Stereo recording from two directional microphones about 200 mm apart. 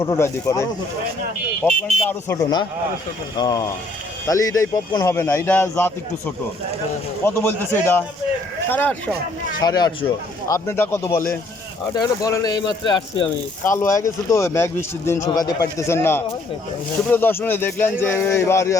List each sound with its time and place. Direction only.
0.0 s speech: 15° left (ahead or behind)
7.3 s speech: 10° left (ahead or behind)
9.6 s speech: 20° left (ahead or behind)